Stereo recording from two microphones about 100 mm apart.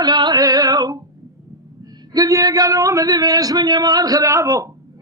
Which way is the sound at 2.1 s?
35° right (ahead or behind).